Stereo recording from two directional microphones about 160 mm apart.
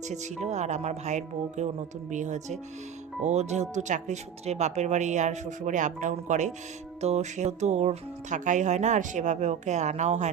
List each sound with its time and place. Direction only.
0.1 s speech: 45° right (ahead or behind)